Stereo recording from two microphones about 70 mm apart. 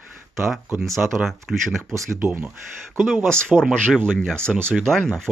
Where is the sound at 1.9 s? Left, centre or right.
Right.